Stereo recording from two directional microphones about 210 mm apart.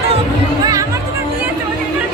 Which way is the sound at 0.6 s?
15° right (ahead or behind).